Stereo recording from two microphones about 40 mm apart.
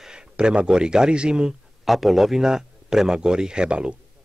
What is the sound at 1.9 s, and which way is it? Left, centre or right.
Speech, centre.